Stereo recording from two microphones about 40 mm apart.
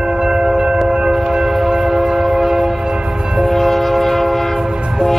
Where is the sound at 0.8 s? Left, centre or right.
Centre.